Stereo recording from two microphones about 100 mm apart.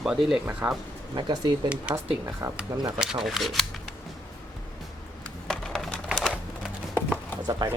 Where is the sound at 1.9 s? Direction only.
10° right (ahead or behind).